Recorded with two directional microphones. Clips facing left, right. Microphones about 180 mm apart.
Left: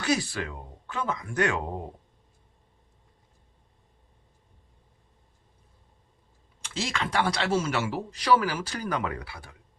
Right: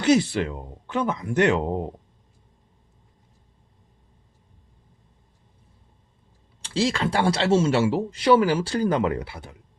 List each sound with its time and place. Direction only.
0.0 s speech: 25° right (ahead or behind)
6.6 s speech: 30° right (ahead or behind)